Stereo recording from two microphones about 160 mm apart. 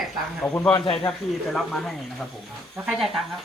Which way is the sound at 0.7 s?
35° left (ahead or behind).